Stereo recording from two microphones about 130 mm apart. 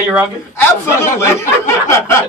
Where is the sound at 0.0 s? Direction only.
10° right (ahead or behind).